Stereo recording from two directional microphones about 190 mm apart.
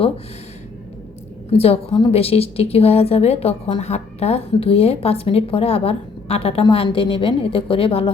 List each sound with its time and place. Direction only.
1.5 s a woman's voice: 30° left (ahead or behind)